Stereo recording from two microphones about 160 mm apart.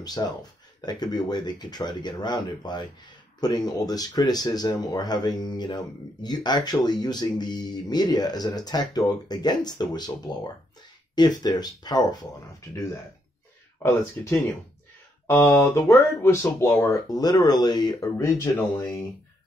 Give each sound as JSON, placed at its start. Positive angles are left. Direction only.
{"t": 0.0, "sound": "speech", "side_deg": 25}
{"t": 14.2, "sound": "speech", "side_deg": 10}